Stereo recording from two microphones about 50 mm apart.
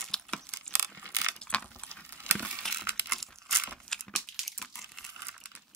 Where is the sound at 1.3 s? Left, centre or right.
Left.